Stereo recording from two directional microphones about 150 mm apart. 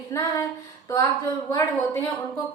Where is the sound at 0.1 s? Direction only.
20° left (ahead or behind).